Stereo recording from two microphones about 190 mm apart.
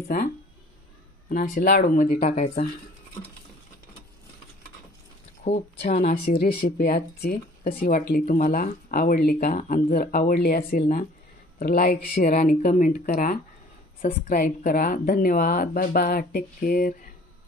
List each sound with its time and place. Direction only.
1.3 s speech: 50° left (ahead or behind)
5.4 s speech: 40° left (ahead or behind)
6.3 s speech: 55° left (ahead or behind)